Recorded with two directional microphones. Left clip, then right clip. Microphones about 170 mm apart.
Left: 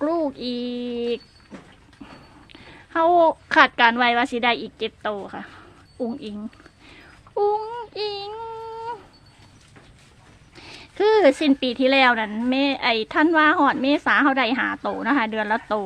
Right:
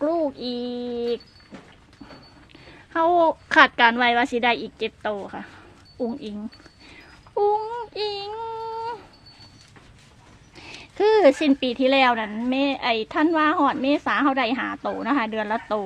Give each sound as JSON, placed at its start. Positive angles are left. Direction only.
{"t": 0.0, "sound": "child singing", "side_deg": 20}
{"t": 2.5, "sound": "a woman's voice", "side_deg": 15}
{"t": 6.8, "sound": "a sound", "side_deg": 5}
{"t": 10.5, "sound": "speech", "side_deg": 5}